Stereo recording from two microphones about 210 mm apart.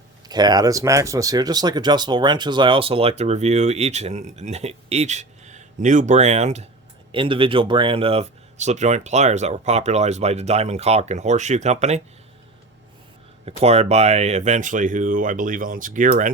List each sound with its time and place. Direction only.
0.3 s speech: 20° right (ahead or behind)
13.6 s speech: 30° right (ahead or behind)